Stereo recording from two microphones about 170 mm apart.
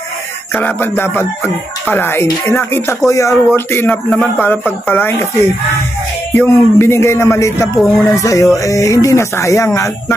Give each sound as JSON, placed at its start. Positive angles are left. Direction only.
{"t": 0.5, "sound": "speech", "side_deg": 10}
{"t": 7.7, "sound": "speech", "side_deg": 0}
{"t": 8.1, "sound": "speech", "side_deg": 20}